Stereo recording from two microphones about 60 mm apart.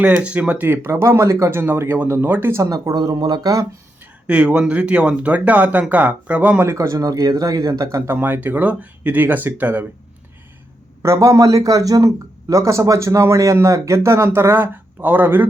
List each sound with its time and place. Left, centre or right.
0.0 s speech: centre
0.7 s speech: right
1.5 s speech: right
2.6 s speech: right
4.3 s speech: centre
6.7 s speech: right
8.1 s speech: right
11.0 s a man's voice: right
14.3 s speech: right